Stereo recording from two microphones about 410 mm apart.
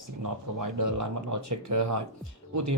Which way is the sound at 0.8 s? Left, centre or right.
Right.